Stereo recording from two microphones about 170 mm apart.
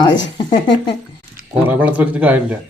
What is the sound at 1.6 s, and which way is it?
Speech, 10° right (ahead or behind).